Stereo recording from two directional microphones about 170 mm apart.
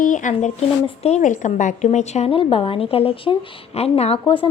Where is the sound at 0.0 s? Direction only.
50° left (ahead or behind).